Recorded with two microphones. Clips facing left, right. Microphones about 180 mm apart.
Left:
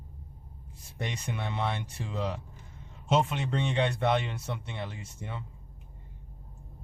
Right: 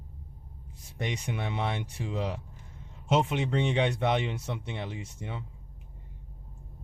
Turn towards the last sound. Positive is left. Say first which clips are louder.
# right 3 dB
turn(degrees=-15)  # may be behind; listen again after turning